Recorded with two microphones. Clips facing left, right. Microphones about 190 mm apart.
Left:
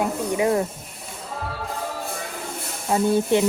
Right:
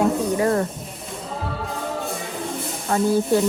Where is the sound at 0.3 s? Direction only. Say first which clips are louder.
Right 1 dB; 15° left (ahead or behind).